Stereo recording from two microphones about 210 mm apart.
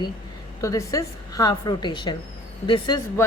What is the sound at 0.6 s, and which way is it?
A woman's voice, 15° left (ahead or behind).